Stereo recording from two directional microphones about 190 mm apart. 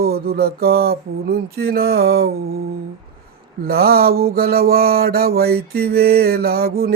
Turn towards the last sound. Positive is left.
turn(degrees=-55)  # may be behind; listen again after turning